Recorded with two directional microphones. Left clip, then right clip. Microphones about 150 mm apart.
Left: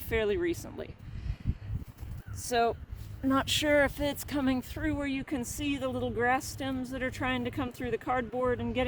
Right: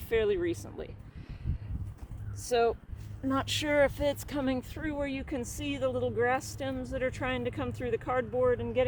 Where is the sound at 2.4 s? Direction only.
50° left (ahead or behind).